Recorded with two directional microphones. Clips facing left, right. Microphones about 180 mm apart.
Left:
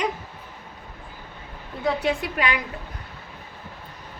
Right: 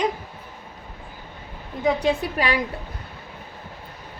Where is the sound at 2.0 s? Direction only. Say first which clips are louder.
Right 2 dB; 35° right (ahead or behind).